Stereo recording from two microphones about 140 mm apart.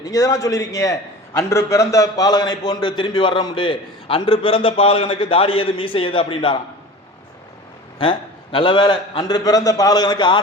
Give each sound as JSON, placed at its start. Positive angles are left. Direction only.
{"t": 0.0, "sound": "a man's voice", "side_deg": 25}
{"t": 8.0, "sound": "a man's voice", "side_deg": 40}